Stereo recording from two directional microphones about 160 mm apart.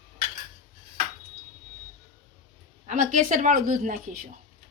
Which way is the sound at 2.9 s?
55° right (ahead or behind).